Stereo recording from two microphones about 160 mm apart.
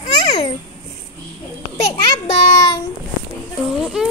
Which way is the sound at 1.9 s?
40° left (ahead or behind).